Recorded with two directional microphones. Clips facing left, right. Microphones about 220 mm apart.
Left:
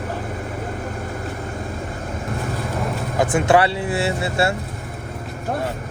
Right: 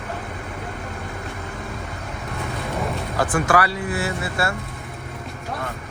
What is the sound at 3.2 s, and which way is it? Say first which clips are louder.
Speech: left 4 dB; 25° left (ahead or behind).